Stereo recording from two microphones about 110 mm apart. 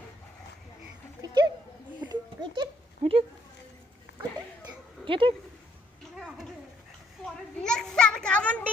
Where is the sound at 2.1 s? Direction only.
40° right (ahead or behind).